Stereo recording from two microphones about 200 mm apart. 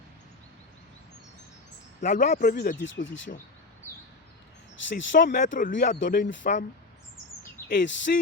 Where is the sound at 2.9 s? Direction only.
70° left (ahead or behind).